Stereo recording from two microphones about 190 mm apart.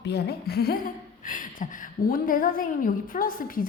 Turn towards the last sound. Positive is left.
turn(degrees=50)  # may be behind; listen again after turning